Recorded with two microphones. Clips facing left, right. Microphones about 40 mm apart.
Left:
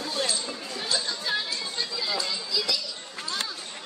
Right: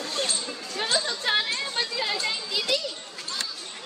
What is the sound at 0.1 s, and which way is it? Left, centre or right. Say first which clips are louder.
Chatter: left 1 dB; right.